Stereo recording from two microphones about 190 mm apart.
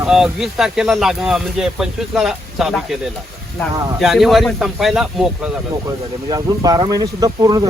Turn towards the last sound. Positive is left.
turn(degrees=-20)  # may be behind; listen again after turning